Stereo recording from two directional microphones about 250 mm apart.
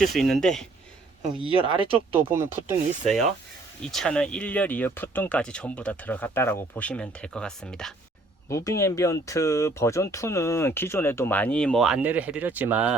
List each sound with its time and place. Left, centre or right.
0.0 s speech: centre
1.4 s speech: right
2.1 s speech: centre
3.9 s speech: centre